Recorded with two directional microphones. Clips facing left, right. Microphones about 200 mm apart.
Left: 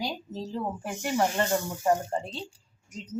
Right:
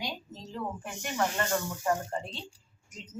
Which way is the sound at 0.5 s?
30° left (ahead or behind).